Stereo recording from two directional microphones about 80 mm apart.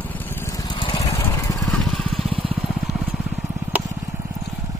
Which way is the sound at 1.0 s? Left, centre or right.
Left.